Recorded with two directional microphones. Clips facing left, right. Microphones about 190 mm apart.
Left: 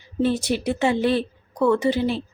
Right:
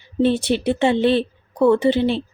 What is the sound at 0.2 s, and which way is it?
A woman's voice, 25° right (ahead or behind).